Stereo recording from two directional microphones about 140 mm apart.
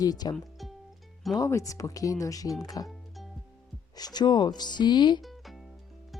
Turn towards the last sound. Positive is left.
turn(degrees=0)  # may be behind; listen again after turning